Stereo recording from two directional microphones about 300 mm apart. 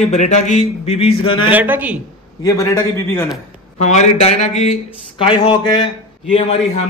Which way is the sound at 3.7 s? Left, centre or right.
Left.